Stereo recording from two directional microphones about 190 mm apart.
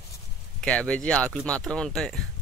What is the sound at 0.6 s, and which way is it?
Speech, 5° left (ahead or behind).